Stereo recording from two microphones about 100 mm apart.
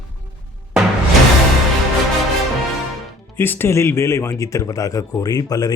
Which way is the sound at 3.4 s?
20° left (ahead or behind).